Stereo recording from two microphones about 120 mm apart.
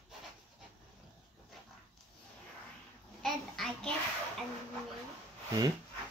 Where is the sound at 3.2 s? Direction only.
5° left (ahead or behind).